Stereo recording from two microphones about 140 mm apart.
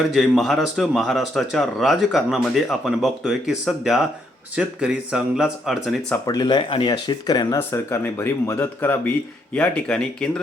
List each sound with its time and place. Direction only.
0.1 s speech: centre (ahead or behind)
6.2 s speech: 30° left (ahead or behind); by 10.4 s 5° left (ahead or behind)